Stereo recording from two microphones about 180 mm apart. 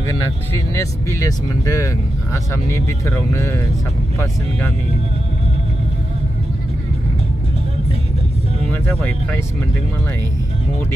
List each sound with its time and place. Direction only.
0.7 s speech: 15° left (ahead or behind)
3.3 s speech: 15° left (ahead or behind)